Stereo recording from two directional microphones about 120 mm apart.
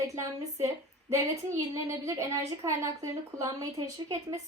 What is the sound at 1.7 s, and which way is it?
A woman's voice, 25° right (ahead or behind).